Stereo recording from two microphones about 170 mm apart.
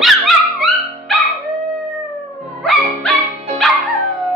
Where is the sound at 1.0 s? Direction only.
Centre (ahead or behind).